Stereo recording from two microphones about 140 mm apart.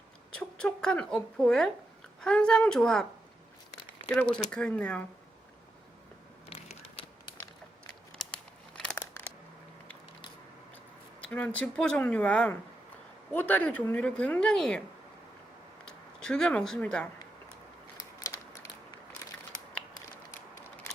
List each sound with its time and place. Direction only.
0.3 s speech: 5° left (ahead or behind)
4.4 s a woman's voice: 5° left (ahead or behind)
6.5 s crushing: 45° left (ahead or behind)
8.2 s a sound: 5° left (ahead or behind)
8.8 s scissors: 5° left (ahead or behind)
11.3 s a woman's voice: 10° left (ahead or behind)
16.2 s speech: 5° left (ahead or behind)